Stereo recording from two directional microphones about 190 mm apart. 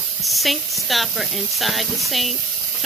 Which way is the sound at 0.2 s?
Centre (ahead or behind).